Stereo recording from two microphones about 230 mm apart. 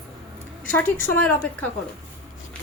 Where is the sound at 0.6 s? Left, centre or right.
Centre.